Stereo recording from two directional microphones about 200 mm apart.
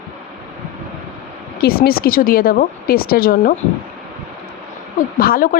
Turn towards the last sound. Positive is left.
turn(degrees=45)  # may be behind; listen again after turning